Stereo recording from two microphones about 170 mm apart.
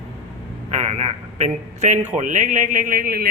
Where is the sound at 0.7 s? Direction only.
40° right (ahead or behind).